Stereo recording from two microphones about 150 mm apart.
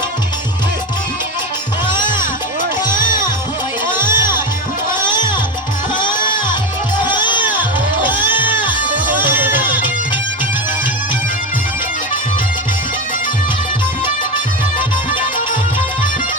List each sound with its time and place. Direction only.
2.8 s music: 30° left (ahead or behind)
3.9 s music: 15° right (ahead or behind)
5.0 s music: 30° left (ahead or behind)
8.3 s music: 10° right (ahead or behind)